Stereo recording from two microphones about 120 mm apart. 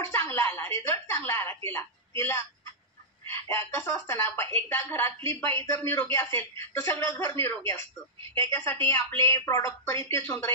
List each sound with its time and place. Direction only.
0.1 s speech: 20° left (ahead or behind)